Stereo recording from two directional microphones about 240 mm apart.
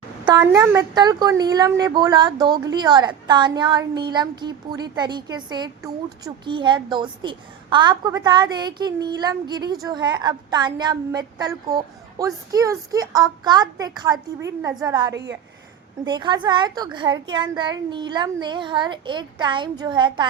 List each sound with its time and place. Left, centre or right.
0.3 s a woman's voice: centre
15.1 s a woman's voice: right
16.0 s a child's voice: centre